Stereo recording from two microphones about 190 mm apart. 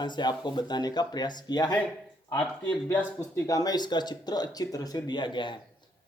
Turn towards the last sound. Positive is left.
turn(degrees=25)  # may be behind; listen again after turning